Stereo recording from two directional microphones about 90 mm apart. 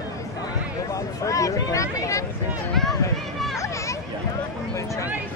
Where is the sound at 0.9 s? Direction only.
40° left (ahead or behind).